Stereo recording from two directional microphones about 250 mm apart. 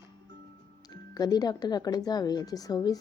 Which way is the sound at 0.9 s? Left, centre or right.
Centre.